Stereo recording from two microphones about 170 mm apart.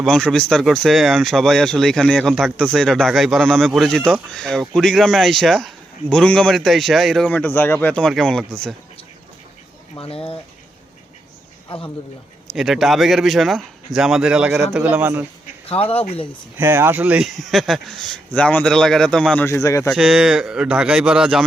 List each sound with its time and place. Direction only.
0.0 s a man's voice: centre (ahead or behind)
10.0 s speech: 30° left (ahead or behind)
11.7 s speech: 35° left (ahead or behind)
12.5 s a man's voice: centre (ahead or behind)
15.7 s speech: 35° left (ahead or behind)
16.6 s a man's voice: 15° right (ahead or behind); by 19.9 s 20° left (ahead or behind)
19.9 s a man's voice: 5° right (ahead or behind)